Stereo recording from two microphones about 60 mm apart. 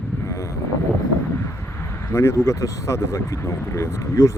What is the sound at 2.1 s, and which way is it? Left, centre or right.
Speech, left.